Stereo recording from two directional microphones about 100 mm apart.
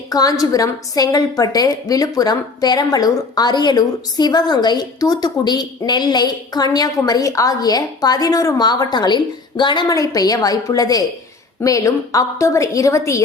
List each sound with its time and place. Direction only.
0.1 s a woman's voice: 40° left (ahead or behind)
9.9 s a woman's voice: 35° left (ahead or behind)